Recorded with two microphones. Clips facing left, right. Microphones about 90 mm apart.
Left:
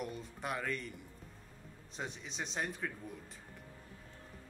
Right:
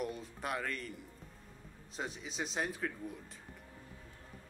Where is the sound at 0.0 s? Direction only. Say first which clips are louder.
Right 2 dB; centre (ahead or behind).